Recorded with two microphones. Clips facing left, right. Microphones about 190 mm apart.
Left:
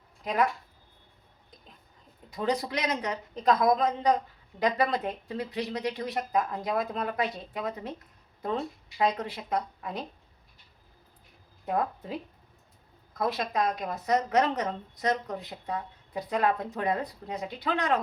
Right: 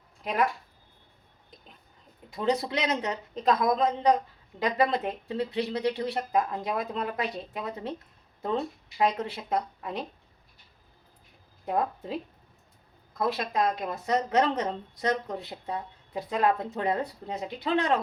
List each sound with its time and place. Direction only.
2.3 s speech: 25° right (ahead or behind)
13.1 s speech: 25° right (ahead or behind)